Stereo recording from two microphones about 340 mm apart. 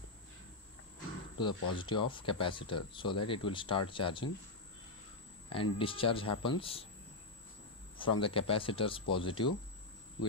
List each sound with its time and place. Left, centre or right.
1.4 s speech: centre
5.5 s speech: centre
8.0 s speech: centre